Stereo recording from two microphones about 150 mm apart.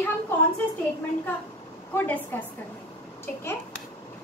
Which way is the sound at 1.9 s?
15° left (ahead or behind).